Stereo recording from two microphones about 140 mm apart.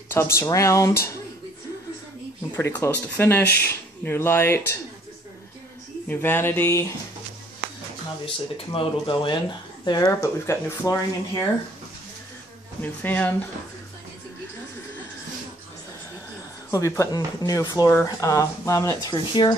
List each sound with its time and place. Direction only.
0.1 s speech: 20° left (ahead or behind)
2.5 s speech: 15° left (ahead or behind)
6.0 s speech: 15° left (ahead or behind)
8.7 s speech: 35° left (ahead or behind)
9.8 s speech: 25° left (ahead or behind)
12.8 s speech: 10° left (ahead or behind)
16.7 s speech: 20° left (ahead or behind)